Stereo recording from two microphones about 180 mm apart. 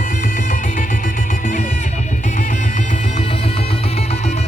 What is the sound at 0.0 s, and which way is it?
Music, 45° left (ahead or behind).